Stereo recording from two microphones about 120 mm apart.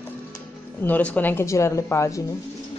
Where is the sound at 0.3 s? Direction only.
15° left (ahead or behind).